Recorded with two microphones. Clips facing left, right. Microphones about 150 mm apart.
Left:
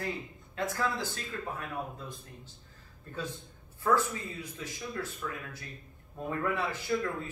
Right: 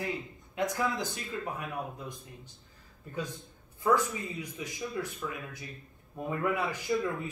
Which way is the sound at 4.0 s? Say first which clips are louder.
Even; 15° right (ahead or behind).